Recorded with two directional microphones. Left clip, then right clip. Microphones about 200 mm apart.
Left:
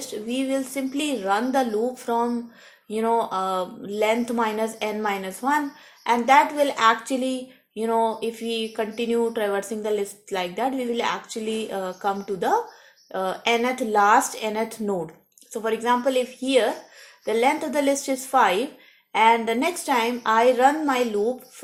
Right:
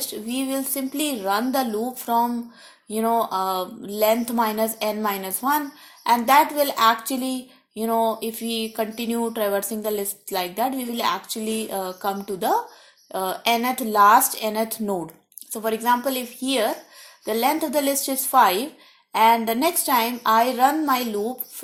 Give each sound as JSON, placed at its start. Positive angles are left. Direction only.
{"t": 0.1, "sound": "speech", "side_deg": -35}
{"t": 17.2, "sound": "speech", "side_deg": -35}